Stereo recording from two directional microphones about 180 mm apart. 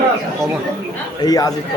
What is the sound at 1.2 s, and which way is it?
Speech, 20° left (ahead or behind).